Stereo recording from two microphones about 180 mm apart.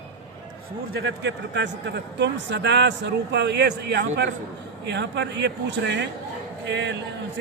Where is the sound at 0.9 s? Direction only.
75° right (ahead or behind).